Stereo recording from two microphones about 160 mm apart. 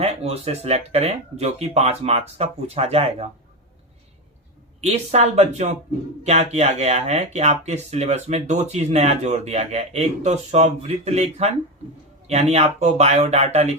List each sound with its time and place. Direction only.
0.0 s speech: 40° right (ahead or behind)
4.8 s speech: 45° right (ahead or behind)